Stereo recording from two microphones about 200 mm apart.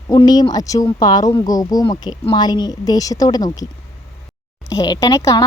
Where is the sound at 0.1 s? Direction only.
20° left (ahead or behind).